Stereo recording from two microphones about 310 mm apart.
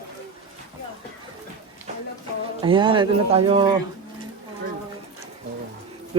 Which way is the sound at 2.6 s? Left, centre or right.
Centre.